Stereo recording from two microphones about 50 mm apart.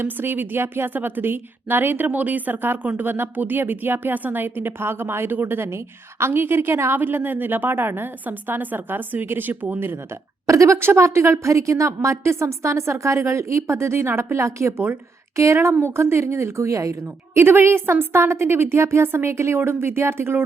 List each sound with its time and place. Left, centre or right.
0.0 s a woman's voice: right
2.0 s a woman's voice: right
5.6 s a woman's voice: right
7.0 s a woman's voice: right
10.4 s a woman's voice: right
10.8 s a woman's voice: right
15.8 s a woman's voice: right